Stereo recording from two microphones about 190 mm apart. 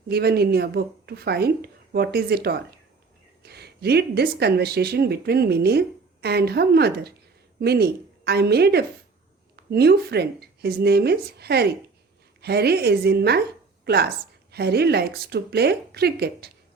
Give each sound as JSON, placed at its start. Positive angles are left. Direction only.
{"t": 0.1, "sound": "a woman's voice", "side_deg": -55}